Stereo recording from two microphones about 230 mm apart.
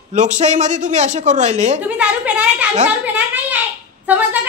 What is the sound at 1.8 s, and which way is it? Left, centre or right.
Speech, centre.